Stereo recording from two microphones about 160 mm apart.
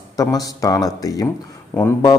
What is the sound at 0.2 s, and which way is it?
A man's voice, 20° left (ahead or behind).